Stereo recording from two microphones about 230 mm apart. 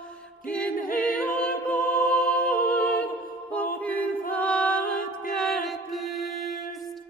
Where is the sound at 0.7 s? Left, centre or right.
Left.